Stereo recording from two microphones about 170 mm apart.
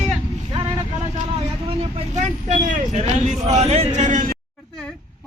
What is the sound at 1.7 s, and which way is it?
A man's voice, 35° right (ahead or behind).